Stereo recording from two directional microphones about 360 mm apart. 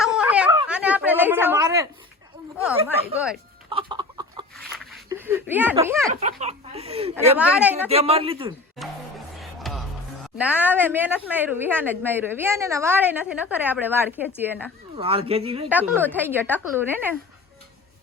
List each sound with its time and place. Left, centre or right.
0.0 s a sound: centre
3.7 s chicken: centre
4.5 s a sound: centre
6.1 s speech: centre
7.3 s a woman's voice: centre
7.9 s speech: centre
8.8 s music: centre
10.3 s a woman's voice: centre
15.0 s speech: centre
15.7 s a woman's voice: centre